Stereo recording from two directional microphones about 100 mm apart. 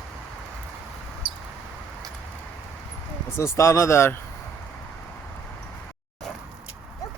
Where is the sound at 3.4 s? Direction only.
30° left (ahead or behind).